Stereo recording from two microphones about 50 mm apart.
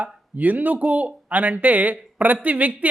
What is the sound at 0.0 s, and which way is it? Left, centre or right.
Speech, right.